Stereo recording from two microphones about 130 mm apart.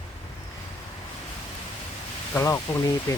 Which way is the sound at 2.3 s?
20° left (ahead or behind).